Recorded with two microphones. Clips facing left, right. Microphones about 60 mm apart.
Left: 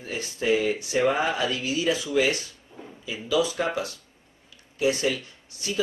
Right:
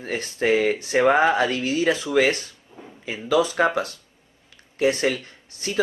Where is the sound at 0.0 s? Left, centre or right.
Right.